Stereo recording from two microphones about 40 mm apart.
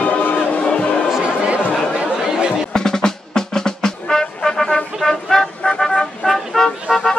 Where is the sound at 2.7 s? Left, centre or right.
Centre.